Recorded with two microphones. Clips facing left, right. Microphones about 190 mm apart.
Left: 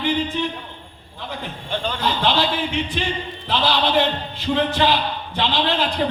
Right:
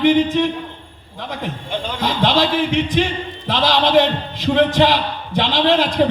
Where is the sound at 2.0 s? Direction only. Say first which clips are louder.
Right 4 dB; 80° right.